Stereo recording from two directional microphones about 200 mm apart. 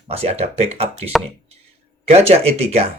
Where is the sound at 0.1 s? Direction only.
30° right (ahead or behind).